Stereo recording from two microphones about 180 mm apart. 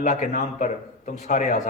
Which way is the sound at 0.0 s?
45° left (ahead or behind).